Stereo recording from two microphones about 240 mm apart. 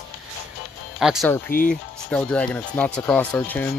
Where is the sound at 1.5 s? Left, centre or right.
Left.